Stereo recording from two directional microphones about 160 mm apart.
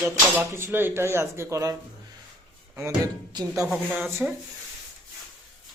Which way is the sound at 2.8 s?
25° right (ahead or behind).